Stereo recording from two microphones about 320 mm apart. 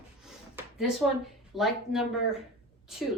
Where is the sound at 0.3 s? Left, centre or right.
Centre.